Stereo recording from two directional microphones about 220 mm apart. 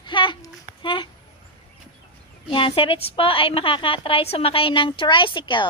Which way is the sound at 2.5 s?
25° left (ahead or behind).